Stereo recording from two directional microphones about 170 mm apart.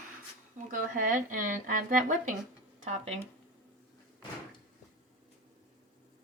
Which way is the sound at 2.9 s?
40° right (ahead or behind).